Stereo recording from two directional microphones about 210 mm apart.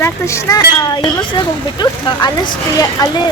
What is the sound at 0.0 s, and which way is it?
Speech, 15° left (ahead or behind).